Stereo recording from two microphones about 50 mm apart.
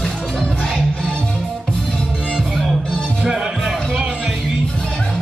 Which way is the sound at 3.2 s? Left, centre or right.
Centre.